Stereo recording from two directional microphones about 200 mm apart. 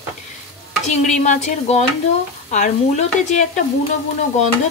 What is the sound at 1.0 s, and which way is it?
A woman's voice, 35° left (ahead or behind).